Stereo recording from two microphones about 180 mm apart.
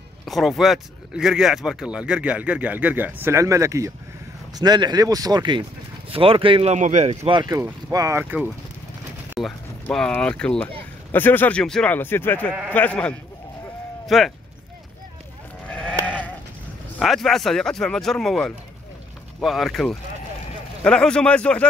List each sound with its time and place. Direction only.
0.2 s speech: centre (ahead or behind); by 7.2 s 40° right (ahead or behind)
7.2 s speech: 25° right (ahead or behind); by 14.3 s centre (ahead or behind)
15.7 s sheep: 5° left (ahead or behind)
17.0 s speech: centre (ahead or behind)